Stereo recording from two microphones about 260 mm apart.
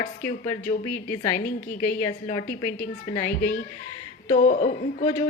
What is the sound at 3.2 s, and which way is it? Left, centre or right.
A woman's voice, left.